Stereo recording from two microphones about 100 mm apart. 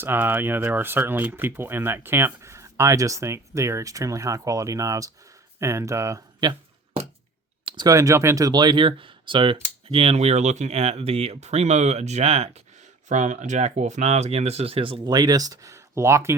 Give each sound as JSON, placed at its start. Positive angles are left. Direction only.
{"t": 0.0, "sound": "speech", "side_deg": -20}
{"t": 7.6, "sound": "clicking", "side_deg": -55}
{"t": 7.9, "sound": "speech", "side_deg": -35}
{"t": 9.9, "sound": "speech", "side_deg": -80}
{"t": 15.0, "sound": "speech", "side_deg": -40}